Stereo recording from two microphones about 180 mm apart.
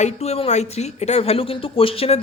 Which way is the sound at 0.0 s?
35° left (ahead or behind).